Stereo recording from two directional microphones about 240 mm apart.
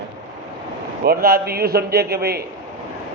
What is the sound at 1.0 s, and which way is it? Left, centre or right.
A man's voice, right.